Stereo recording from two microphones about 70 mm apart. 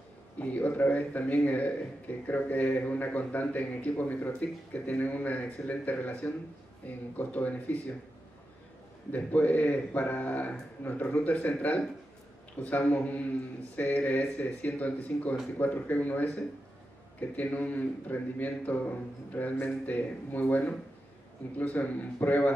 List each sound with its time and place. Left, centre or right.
0.4 s a man's voice: left
9.1 s a man's voice: left